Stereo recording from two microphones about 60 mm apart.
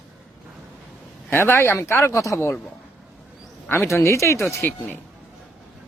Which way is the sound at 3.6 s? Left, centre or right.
Left.